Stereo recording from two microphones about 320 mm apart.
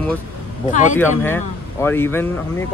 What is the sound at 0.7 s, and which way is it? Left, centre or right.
Speech, left.